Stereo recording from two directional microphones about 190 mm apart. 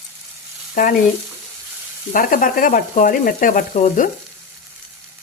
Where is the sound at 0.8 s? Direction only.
45° left (ahead or behind).